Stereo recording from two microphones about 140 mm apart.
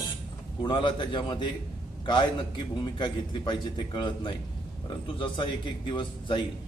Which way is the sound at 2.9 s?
35° left (ahead or behind).